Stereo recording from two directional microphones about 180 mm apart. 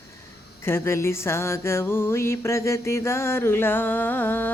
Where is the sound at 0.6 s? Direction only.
15° left (ahead or behind).